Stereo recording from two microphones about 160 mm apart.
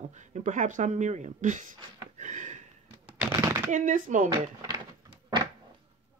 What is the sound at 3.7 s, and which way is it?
Speech, 55° right (ahead or behind).